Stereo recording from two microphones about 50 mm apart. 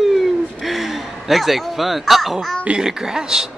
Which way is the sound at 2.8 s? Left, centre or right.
Centre.